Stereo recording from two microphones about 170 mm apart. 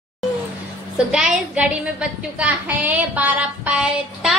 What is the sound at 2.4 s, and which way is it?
Child singing, 10° right (ahead or behind).